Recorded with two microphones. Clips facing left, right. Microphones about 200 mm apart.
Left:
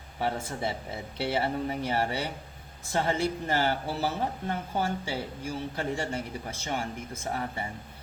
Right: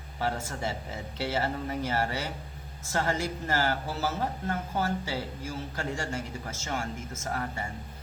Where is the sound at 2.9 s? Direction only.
20° left (ahead or behind).